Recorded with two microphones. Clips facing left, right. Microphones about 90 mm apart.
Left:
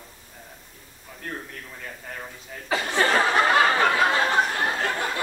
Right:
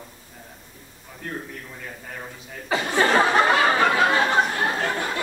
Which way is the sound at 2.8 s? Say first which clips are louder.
Right 3 dB; 15° right (ahead or behind).